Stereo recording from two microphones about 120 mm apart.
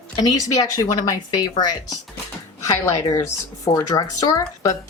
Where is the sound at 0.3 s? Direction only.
30° left (ahead or behind).